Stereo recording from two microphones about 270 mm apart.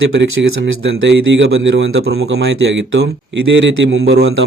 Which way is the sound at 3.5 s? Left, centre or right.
Right.